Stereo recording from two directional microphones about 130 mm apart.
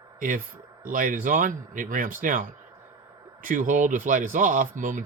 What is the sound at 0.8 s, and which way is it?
Speech, 90° right.